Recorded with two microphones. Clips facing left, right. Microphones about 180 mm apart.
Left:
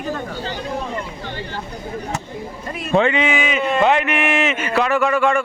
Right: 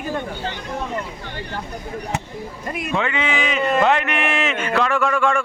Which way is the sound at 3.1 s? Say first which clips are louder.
Left 3 dB; 15° left (ahead or behind).